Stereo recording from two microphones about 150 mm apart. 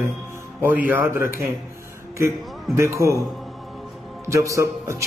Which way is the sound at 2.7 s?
20° right (ahead or behind).